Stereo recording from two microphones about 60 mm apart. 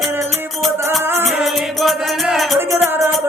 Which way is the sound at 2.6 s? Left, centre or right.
Right.